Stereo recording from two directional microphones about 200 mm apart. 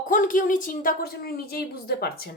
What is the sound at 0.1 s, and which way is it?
A woman's voice, 40° left (ahead or behind).